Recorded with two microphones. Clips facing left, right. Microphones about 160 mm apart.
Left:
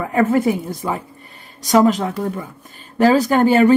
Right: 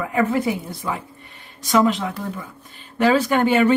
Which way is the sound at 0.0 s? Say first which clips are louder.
Left 4 dB; 45° left (ahead or behind).